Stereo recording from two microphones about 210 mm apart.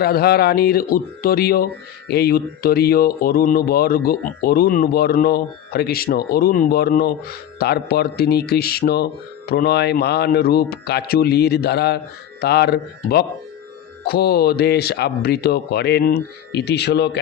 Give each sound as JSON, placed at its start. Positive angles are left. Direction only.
{"t": 0.0, "sound": "speech", "side_deg": 45}